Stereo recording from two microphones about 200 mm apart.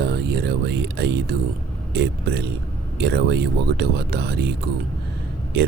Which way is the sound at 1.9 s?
55° right (ahead or behind).